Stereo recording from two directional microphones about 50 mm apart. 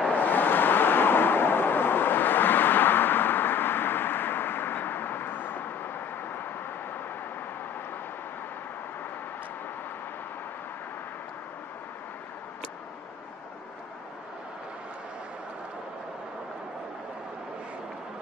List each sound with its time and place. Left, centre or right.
0.1 s vehicle: left